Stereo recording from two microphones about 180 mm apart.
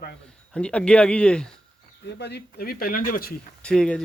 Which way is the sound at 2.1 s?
70° left (ahead or behind).